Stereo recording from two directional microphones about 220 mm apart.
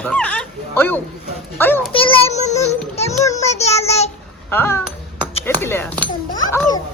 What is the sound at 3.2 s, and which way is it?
Child singing, 15° left (ahead or behind).